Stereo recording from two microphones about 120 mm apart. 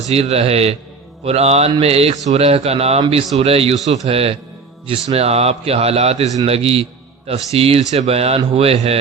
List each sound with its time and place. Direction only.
0.1 s a man's voice: 55° right (ahead or behind)